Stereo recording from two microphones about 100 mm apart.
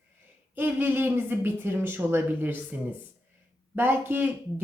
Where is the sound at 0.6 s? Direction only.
20° right (ahead or behind).